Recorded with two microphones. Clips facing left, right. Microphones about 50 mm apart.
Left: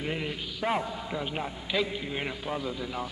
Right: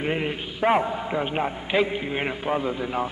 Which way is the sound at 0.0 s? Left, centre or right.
Right.